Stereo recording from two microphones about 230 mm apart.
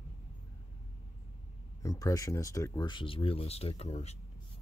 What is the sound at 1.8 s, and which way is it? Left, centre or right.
Speech, centre.